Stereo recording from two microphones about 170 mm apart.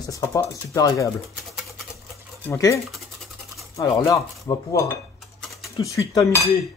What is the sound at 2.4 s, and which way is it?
A man's voice, 15° left (ahead or behind).